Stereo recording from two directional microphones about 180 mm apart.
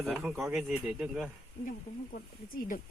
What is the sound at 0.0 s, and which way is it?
Speech, centre (ahead or behind).